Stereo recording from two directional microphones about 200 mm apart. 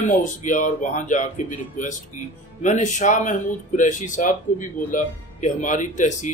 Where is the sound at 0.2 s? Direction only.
40° left (ahead or behind).